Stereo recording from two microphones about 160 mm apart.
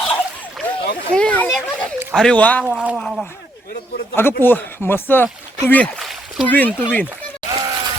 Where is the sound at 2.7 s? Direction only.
5° right (ahead or behind).